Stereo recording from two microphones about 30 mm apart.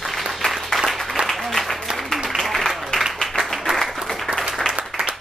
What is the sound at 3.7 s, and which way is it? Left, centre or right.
Applause, right.